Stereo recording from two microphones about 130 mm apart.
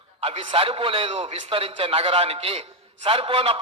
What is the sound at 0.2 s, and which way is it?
A man's voice, 45° right (ahead or behind).